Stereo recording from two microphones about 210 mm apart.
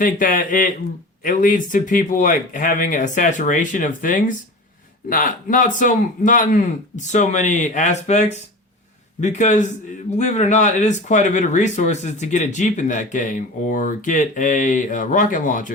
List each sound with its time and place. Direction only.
0.0 s speech: 40° left (ahead or behind)